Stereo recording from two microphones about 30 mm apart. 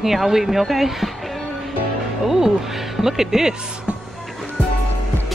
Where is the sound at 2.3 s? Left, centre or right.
Centre.